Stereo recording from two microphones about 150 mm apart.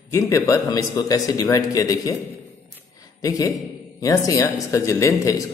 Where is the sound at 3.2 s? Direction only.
25° left (ahead or behind).